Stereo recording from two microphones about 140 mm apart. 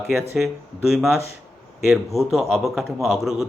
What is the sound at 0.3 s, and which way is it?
Speech, centre (ahead or behind).